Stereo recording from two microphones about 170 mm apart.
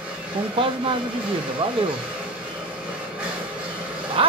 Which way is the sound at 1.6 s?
35° right (ahead or behind).